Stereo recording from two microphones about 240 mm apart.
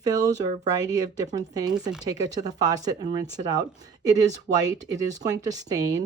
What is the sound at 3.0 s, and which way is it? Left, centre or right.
Speech, right.